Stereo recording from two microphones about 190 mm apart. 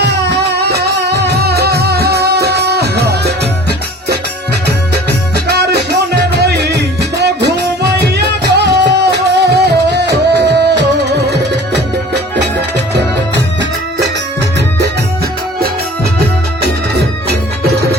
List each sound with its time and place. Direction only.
0.0 s music: 65° right (ahead or behind)
5.5 s music: 60° right (ahead or behind)
16.6 s music: 60° right (ahead or behind)